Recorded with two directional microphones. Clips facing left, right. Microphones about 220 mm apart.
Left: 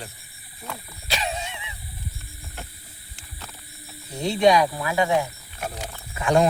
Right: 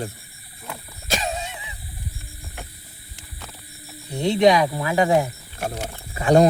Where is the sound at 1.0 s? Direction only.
45° right (ahead or behind).